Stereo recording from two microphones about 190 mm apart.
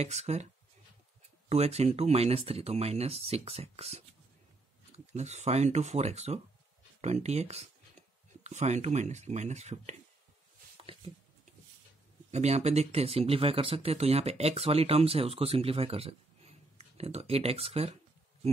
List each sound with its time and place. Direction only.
0.0 s speech: 35° right (ahead or behind)
1.5 s speech: 35° right (ahead or behind)
12.3 s speech: 35° right (ahead or behind)